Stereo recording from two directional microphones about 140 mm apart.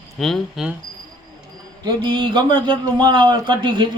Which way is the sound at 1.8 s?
35° right (ahead or behind).